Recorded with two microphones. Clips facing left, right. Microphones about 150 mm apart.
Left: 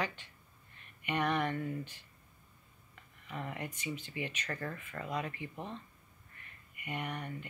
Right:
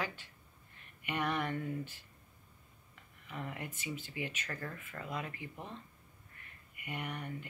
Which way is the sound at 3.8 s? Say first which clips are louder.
Even; 10° right (ahead or behind).